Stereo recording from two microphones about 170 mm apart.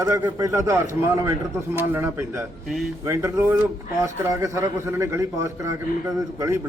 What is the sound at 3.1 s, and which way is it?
A man's voice, 15° right (ahead or behind).